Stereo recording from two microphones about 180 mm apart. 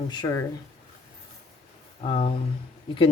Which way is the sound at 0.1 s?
20° left (ahead or behind).